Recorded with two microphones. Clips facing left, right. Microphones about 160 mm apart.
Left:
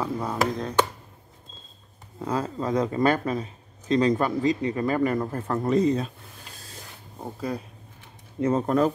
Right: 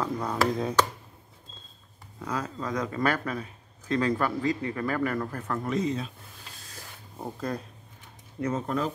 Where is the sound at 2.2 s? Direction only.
30° left (ahead or behind).